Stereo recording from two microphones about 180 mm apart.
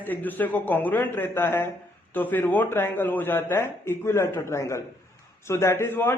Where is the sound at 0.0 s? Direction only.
10° left (ahead or behind).